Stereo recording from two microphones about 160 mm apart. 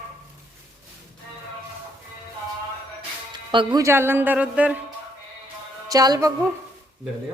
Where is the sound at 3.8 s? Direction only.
15° right (ahead or behind).